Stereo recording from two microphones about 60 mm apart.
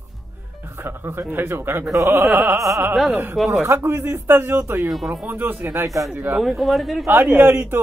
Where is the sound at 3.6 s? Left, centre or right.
Right.